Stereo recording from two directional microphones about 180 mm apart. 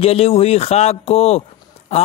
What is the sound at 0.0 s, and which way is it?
Speech, 35° left (ahead or behind).